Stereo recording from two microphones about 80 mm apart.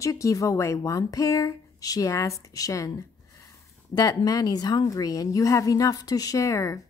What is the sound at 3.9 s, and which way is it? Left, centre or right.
A woman's voice, left.